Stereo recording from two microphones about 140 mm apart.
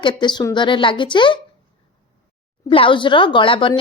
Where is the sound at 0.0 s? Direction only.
35° left (ahead or behind).